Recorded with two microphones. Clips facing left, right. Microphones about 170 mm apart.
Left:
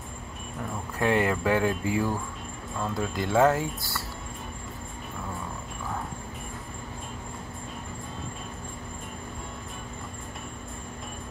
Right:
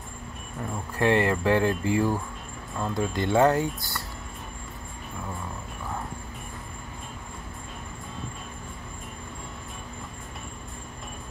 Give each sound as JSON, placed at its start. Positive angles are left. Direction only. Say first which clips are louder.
{"t": 0.9, "sound": "speech", "louder": "right 2 dB", "side_deg": 0}